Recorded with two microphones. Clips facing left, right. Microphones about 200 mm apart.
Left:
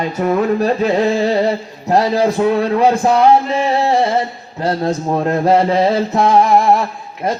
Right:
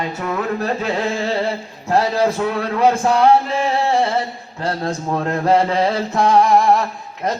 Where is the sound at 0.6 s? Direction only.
15° left (ahead or behind).